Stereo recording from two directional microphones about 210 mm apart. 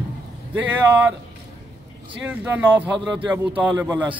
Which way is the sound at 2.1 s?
10° right (ahead or behind).